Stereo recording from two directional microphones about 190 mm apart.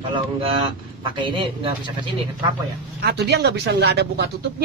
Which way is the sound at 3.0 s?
60° right (ahead or behind).